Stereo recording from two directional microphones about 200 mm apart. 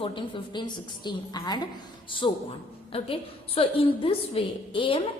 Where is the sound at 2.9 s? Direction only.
30° left (ahead or behind).